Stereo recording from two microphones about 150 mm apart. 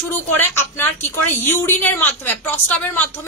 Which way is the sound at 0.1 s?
15° left (ahead or behind).